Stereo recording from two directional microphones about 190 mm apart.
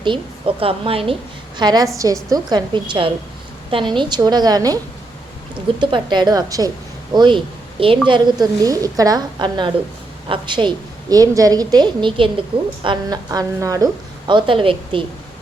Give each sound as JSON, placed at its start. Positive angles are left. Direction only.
{"t": 0.0, "sound": "a woman's voice", "side_deg": -25}
{"t": 5.8, "sound": "a woman's voice", "side_deg": -25}